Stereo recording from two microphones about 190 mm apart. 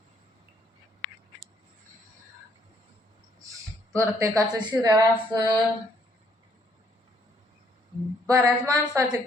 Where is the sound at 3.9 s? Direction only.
15° right (ahead or behind).